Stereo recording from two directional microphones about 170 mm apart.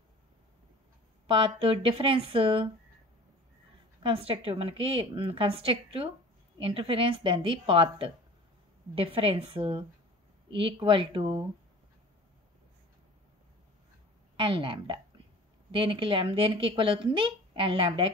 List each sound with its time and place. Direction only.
1.2 s a woman's voice: 30° right (ahead or behind)
4.0 s a woman's voice: 35° right (ahead or behind)
14.3 s a woman's voice: 30° right (ahead or behind)